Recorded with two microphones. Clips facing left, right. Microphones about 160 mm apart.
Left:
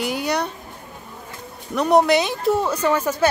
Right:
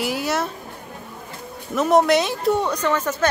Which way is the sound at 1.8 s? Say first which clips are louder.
Even; centre (ahead or behind).